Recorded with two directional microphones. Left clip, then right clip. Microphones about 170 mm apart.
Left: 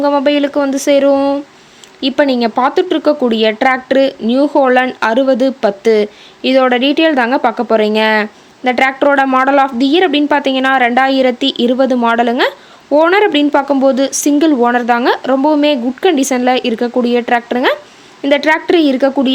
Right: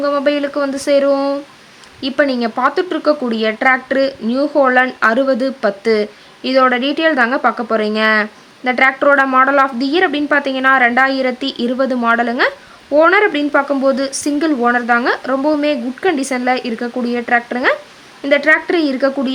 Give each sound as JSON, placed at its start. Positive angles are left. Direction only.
{"t": 0.0, "sound": "speech", "side_deg": 20}